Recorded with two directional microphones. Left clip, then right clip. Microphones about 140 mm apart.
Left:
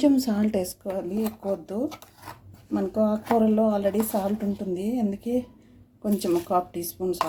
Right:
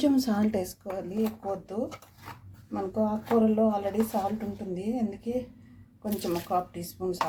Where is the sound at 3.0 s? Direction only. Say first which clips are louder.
Left 3 dB; 55° left (ahead or behind).